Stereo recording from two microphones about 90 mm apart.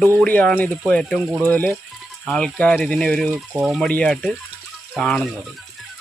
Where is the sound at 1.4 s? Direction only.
20° left (ahead or behind).